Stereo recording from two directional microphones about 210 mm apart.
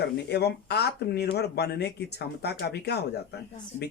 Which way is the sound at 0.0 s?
50° left (ahead or behind).